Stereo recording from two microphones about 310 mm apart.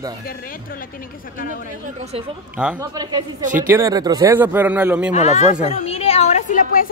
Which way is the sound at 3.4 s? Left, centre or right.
Right.